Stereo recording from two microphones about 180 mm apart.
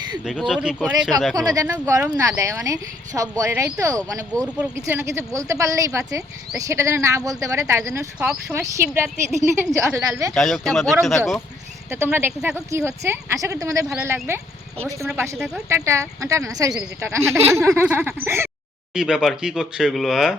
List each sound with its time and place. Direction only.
0.3 s speech: centre (ahead or behind)
1.5 s speech: 20° right (ahead or behind)
10.3 s speech: centre (ahead or behind)
11.9 s speech: 15° right (ahead or behind)